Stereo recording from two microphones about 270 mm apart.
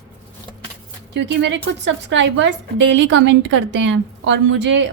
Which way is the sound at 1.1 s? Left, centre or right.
Right.